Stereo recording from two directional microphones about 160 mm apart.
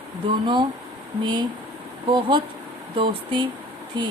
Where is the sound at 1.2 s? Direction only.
30° right (ahead or behind).